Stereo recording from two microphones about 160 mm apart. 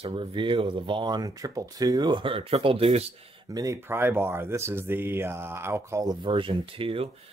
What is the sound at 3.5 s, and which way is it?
Speech, 20° right (ahead or behind).